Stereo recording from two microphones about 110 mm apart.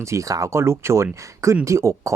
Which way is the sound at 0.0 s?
30° right (ahead or behind).